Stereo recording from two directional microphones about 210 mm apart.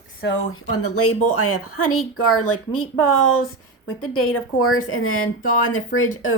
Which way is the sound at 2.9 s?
70° left (ahead or behind).